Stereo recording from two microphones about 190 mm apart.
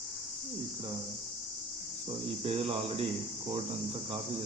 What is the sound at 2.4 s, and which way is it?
Speech, 30° right (ahead or behind).